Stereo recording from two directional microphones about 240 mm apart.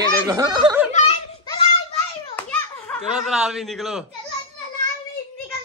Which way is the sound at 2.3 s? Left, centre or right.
Centre.